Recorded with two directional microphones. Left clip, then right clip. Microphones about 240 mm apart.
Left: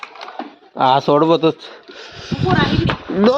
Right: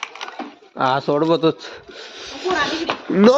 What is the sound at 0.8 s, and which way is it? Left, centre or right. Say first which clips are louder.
Speech: left 5 dB; centre.